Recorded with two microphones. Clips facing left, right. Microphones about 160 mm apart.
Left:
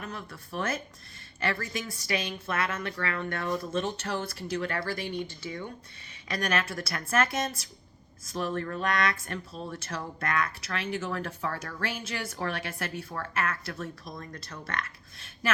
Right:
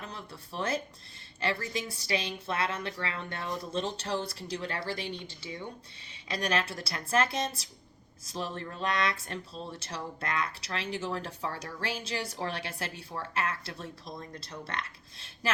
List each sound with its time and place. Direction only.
0.1 s speech: 30° right (ahead or behind)
6.2 s speech: 25° right (ahead or behind)